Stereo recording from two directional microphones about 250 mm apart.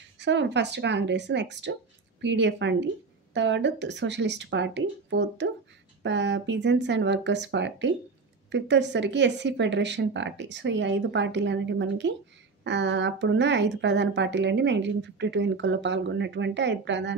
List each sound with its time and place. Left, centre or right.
0.2 s speech: right